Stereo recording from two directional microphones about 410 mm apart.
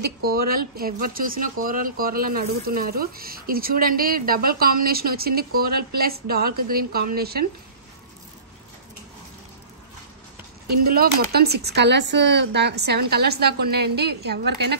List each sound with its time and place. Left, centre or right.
0.2 s speech: right
10.9 s speech: right